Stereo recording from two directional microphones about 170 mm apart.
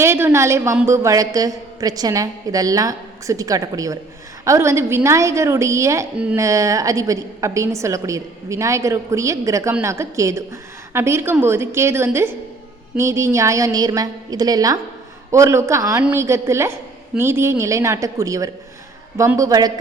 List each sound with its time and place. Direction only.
0.0 s a woman's voice: 15° right (ahead or behind)
6.1 s a woman's voice: 5° right (ahead or behind)
6.4 s a woman's voice: 20° right (ahead or behind)